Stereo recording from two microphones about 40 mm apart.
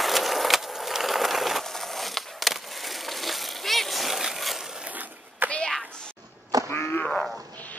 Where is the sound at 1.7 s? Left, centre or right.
Centre.